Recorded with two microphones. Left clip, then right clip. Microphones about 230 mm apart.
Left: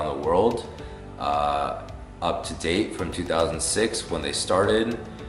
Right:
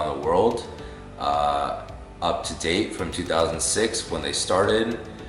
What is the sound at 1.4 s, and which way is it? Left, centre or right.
Speech, centre.